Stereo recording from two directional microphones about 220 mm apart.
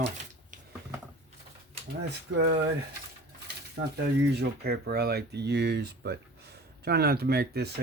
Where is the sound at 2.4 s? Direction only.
45° right (ahead or behind).